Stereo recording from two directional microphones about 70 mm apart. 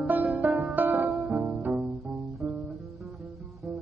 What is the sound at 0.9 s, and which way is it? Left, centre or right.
Music, centre.